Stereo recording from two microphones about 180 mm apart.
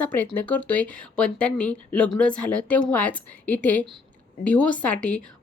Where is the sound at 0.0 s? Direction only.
10° left (ahead or behind).